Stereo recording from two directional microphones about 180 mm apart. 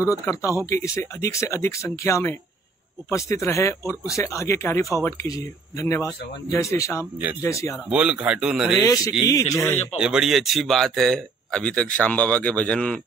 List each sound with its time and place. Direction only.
0.2 s speech: 15° left (ahead or behind)
7.7 s speech: 5° right (ahead or behind)
8.8 s speech: 20° left (ahead or behind)
9.9 s speech: 5° right (ahead or behind)